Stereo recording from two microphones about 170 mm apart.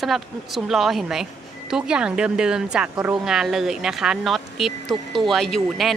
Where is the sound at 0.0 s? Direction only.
Centre (ahead or behind).